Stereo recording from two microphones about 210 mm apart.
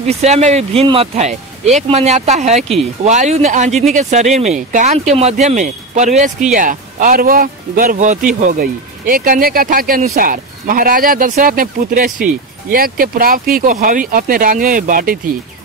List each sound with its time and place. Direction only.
0.0 s speech: 30° right (ahead or behind)